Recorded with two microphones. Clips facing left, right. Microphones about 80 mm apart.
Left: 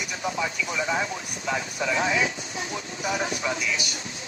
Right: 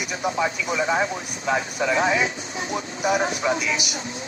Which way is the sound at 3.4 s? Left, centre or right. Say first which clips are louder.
Right 7 dB; right.